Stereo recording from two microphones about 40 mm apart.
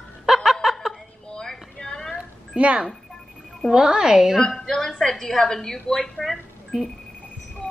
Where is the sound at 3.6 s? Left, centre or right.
Centre.